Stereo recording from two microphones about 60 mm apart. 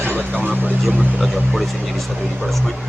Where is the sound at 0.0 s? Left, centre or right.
Right.